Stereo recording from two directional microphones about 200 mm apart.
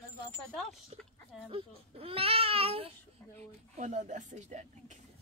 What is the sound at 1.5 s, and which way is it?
Speech, 30° right (ahead or behind).